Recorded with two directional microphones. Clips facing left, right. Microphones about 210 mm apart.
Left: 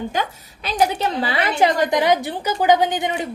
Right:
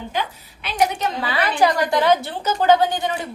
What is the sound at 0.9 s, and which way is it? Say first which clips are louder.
A woman's voice: left 2 dB; 30° left (ahead or behind).